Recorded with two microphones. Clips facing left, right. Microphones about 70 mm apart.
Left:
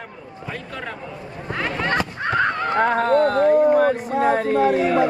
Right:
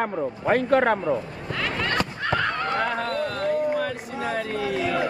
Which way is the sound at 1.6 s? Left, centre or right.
Left.